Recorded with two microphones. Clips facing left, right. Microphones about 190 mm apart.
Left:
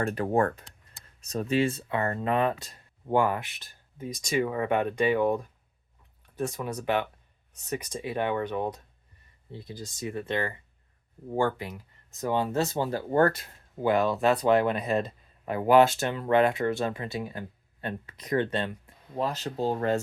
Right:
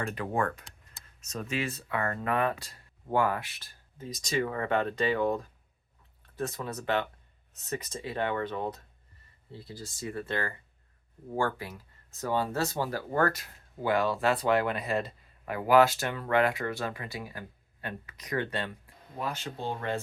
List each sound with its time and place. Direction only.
0.0 s speech: 45° left (ahead or behind); by 18.7 s 25° left (ahead or behind)
19.1 s speech: 35° left (ahead or behind)